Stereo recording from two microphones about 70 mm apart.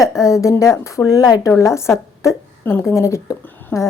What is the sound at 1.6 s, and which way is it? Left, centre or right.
A woman's voice, left.